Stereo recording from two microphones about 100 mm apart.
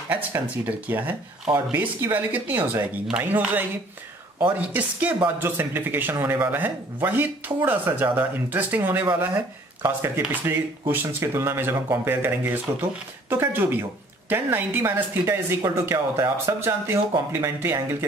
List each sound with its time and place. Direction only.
0.1 s speech: 20° right (ahead or behind)